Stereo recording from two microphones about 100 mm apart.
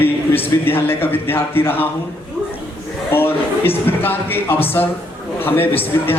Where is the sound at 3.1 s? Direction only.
20° left (ahead or behind).